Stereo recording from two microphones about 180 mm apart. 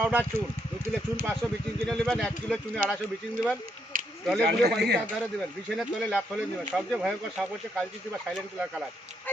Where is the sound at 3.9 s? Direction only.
50° right (ahead or behind).